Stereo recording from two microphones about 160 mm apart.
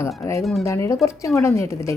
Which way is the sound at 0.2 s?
15° left (ahead or behind).